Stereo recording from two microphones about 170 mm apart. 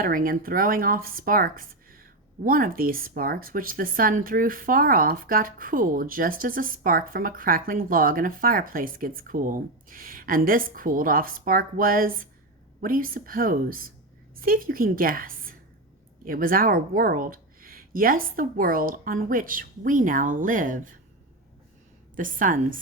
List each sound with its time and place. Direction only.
0.0 s speech: 55° right (ahead or behind)
22.1 s a woman's voice: 50° right (ahead or behind)